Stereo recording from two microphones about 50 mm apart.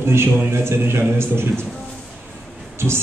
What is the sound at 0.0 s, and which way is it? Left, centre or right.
A man's voice, right.